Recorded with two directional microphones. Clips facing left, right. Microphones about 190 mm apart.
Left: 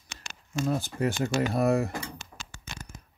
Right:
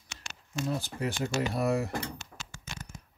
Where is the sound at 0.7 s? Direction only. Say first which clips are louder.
Left 4 dB; 50° left (ahead or behind).